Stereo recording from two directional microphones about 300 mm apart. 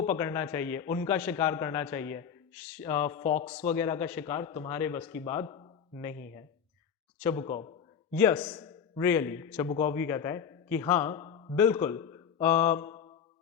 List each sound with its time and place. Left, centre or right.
0.1 s speech: centre
3.2 s speech: left
3.8 s speech: centre
8.1 s a man's voice: centre